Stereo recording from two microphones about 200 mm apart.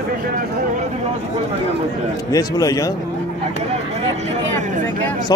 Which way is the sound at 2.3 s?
15° left (ahead or behind).